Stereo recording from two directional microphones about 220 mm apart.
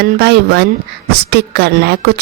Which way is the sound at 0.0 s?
50° right (ahead or behind).